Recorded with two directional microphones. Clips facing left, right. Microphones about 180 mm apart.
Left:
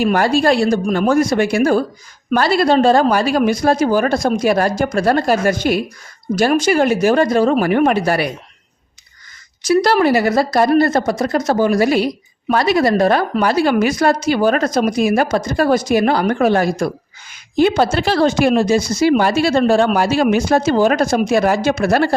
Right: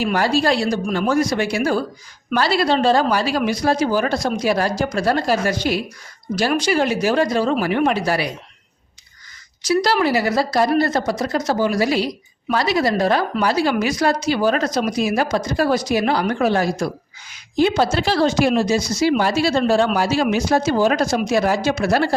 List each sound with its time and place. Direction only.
0.0 s a woman's voice: 50° left (ahead or behind)
9.6 s a woman's voice: 50° left (ahead or behind)
17.9 s a woman's voice: 55° left (ahead or behind)